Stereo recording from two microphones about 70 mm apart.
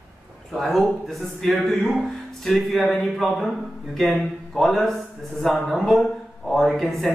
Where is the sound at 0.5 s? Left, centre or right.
Centre.